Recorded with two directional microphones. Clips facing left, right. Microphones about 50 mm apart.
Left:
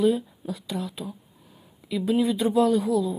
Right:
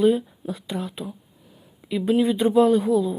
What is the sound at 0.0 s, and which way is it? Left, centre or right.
Speech, right.